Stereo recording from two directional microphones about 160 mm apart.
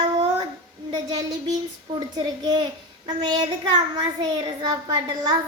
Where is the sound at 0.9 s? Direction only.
25° right (ahead or behind).